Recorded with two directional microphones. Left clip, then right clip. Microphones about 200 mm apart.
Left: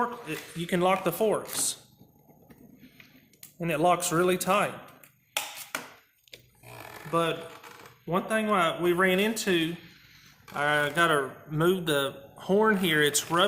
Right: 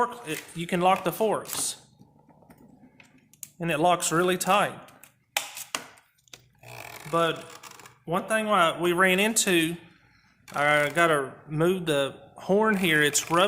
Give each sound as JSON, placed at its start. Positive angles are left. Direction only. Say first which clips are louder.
{"t": 0.0, "sound": "a man's voice", "louder": "right 3 dB", "side_deg": -40}
{"t": 3.6, "sound": "speech", "louder": "right 1 dB", "side_deg": -35}
{"t": 7.1, "sound": "speech", "louder": "right 2 dB", "side_deg": -35}
{"t": 10.5, "sound": "a man's voice", "louder": "right 3 dB", "side_deg": -35}